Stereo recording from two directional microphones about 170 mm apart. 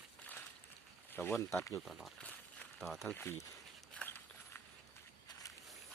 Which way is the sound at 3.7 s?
5° left (ahead or behind).